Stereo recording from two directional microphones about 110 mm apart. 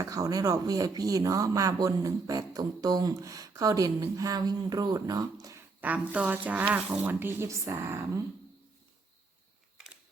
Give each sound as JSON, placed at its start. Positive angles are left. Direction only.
{"t": 0.0, "sound": "speech", "side_deg": -35}
{"t": 5.8, "sound": "speech", "side_deg": -15}
{"t": 9.7, "sound": "a sound", "side_deg": -10}